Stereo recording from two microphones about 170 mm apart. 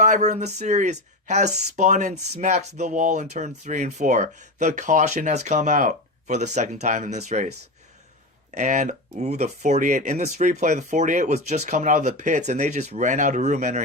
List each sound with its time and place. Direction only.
0.0 s speech: 45° right (ahead or behind)
8.5 s speech: 45° right (ahead or behind)